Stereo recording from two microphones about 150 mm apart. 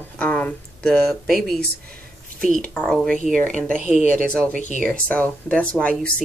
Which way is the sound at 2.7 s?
Centre (ahead or behind).